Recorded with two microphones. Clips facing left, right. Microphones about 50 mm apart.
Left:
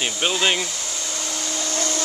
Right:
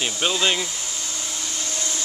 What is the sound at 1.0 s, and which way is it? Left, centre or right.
Hair dryer, left.